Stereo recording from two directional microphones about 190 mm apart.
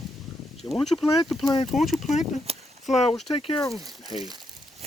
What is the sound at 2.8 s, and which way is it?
Speech, 35° left (ahead or behind).